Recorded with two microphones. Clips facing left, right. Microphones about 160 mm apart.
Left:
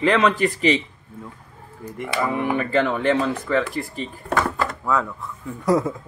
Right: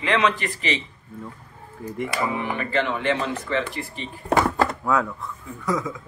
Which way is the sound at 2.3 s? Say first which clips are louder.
Left 4 dB; 45° left (ahead or behind).